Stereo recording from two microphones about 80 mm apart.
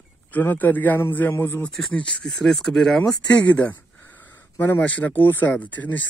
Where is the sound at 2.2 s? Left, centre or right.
Centre.